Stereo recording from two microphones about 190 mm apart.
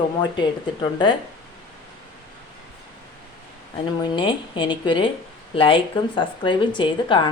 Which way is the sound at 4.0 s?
25° left (ahead or behind).